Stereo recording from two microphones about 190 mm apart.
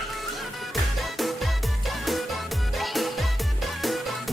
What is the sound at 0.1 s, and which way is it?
Music, centre (ahead or behind).